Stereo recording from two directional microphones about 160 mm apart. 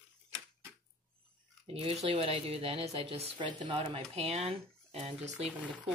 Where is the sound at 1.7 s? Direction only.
40° right (ahead or behind).